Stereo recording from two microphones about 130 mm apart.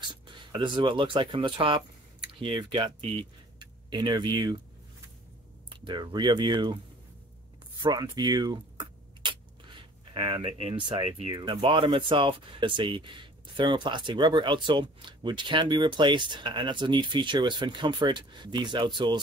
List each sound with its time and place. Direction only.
0.0 s speech: 35° right (ahead or behind)
5.7 s speech: 35° right (ahead or behind)
7.8 s speech: 30° right (ahead or behind)